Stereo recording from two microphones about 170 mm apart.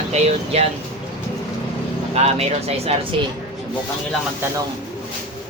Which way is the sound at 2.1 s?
40° right (ahead or behind).